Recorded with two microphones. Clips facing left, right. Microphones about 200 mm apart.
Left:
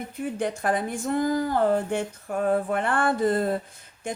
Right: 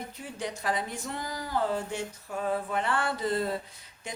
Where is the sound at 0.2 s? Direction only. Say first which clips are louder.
Left 10 dB; 55° left (ahead or behind).